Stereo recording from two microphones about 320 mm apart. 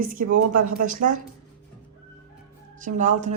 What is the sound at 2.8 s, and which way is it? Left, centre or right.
Speech, right.